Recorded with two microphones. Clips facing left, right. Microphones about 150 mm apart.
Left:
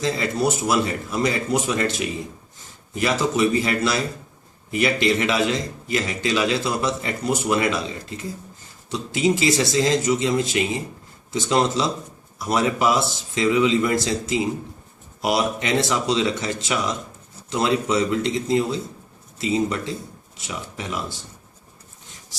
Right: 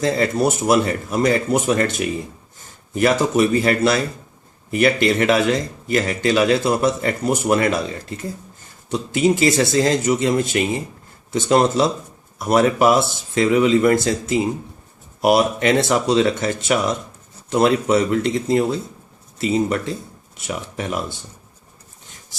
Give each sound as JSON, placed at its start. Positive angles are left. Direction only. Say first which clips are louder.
{"t": 0.0, "sound": "speech", "louder": "right 4 dB", "side_deg": -50}
{"t": 2.9, "sound": "speech", "louder": "right 5 dB", "side_deg": -50}
{"t": 8.9, "sound": "speech", "louder": "right 3 dB", "side_deg": -55}
{"t": 20.5, "sound": "speech", "louder": "right 5 dB", "side_deg": -55}